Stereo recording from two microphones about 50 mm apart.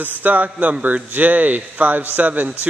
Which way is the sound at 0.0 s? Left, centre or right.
Right.